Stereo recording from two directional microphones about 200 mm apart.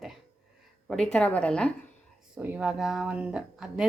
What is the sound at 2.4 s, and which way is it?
A woman's voice, 5° right (ahead or behind).